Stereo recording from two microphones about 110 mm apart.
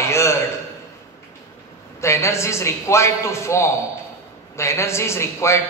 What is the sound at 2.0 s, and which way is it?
A man's voice, 25° left (ahead or behind).